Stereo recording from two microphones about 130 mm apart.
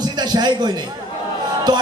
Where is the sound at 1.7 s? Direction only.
30° right (ahead or behind).